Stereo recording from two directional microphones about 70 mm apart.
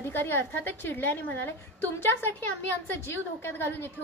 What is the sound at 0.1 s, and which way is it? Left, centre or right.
A woman's voice, left.